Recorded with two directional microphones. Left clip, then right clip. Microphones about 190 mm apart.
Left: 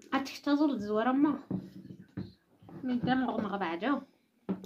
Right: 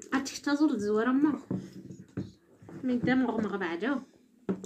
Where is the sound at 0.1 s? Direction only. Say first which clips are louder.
Even; 30° left (ahead or behind).